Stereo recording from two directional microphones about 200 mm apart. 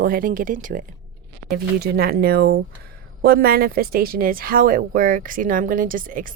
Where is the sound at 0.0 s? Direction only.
45° right (ahead or behind).